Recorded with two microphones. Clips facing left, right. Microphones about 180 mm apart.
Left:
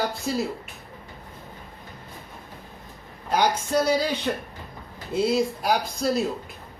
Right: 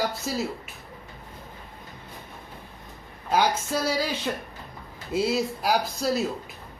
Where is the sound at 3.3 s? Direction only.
5° right (ahead or behind).